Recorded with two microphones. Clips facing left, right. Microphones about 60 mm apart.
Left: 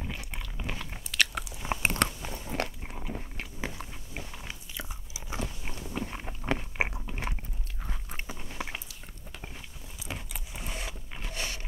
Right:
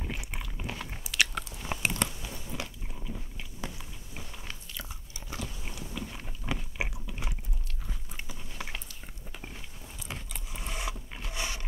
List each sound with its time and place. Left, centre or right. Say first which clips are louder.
0.0 s a sound: right 1 dB; centre
0.7 s biting: even; centre
1.5 s biting: left 3 dB; centre
1.9 s biting: left 4 dB; left
2.5 s biting: left 9 dB; left
5.3 s biting: left 3 dB; left
8.5 s biting: left 2 dB; centre
10.0 s keys jangling: left 2 dB; centre
10.5 s mechanisms: even; centre
11.3 s mechanisms: right 1 dB; centre